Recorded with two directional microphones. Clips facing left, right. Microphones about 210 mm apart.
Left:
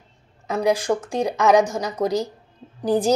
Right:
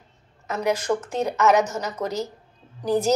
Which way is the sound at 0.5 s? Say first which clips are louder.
Left 3 dB; 10° left (ahead or behind).